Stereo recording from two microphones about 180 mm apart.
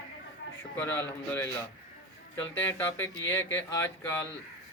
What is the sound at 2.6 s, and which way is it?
A man's voice, 15° left (ahead or behind).